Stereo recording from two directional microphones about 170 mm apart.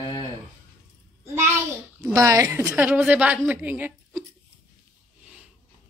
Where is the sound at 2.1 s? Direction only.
20° right (ahead or behind).